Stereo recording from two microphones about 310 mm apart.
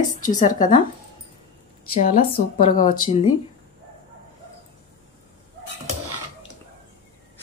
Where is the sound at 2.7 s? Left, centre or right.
Left.